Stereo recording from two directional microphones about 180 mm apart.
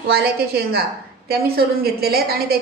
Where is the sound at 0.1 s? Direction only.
60° right (ahead or behind).